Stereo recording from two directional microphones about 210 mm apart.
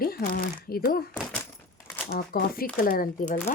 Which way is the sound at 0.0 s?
45° left (ahead or behind).